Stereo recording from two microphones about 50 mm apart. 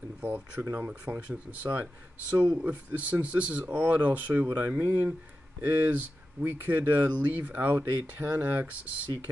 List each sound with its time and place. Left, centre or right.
0.2 s speech: right